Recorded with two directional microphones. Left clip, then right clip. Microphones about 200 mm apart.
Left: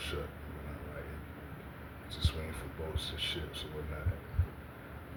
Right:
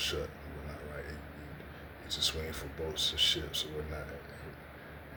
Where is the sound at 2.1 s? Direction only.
20° right (ahead or behind).